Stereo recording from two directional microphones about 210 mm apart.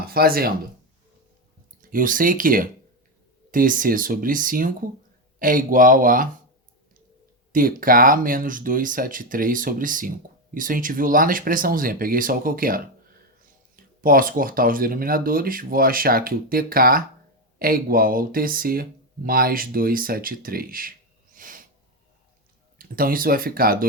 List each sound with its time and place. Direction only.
0.1 s speech: 45° right (ahead or behind)
1.8 s speech: 40° right (ahead or behind)
7.5 s speech: 40° right (ahead or behind)
21.3 s snort: 40° right (ahead or behind)
22.8 s speech: 40° right (ahead or behind)